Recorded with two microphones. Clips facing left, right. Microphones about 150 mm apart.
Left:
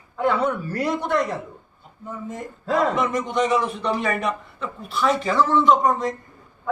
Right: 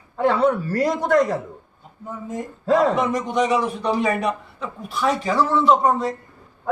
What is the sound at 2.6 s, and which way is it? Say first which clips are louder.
Speech: right 3 dB; 35° right (ahead or behind).